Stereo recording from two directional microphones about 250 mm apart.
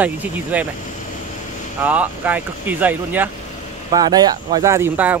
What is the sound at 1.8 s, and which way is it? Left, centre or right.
Speech, centre.